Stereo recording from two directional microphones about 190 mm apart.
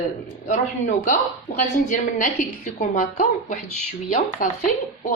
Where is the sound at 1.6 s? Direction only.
40° left (ahead or behind).